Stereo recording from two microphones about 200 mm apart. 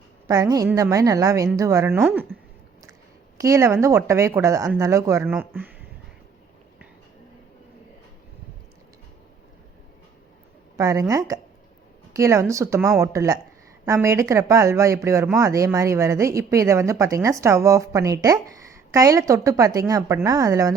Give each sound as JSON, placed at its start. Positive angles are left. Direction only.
{"t": 0.3, "sound": "a woman's voice", "side_deg": -20}
{"t": 3.3, "sound": "a woman's voice", "side_deg": -15}
{"t": 10.8, "sound": "a woman's voice", "side_deg": -15}